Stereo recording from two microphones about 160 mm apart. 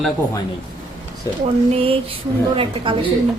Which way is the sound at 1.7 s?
35° right (ahead or behind).